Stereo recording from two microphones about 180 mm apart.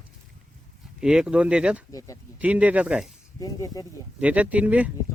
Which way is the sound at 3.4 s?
20° left (ahead or behind).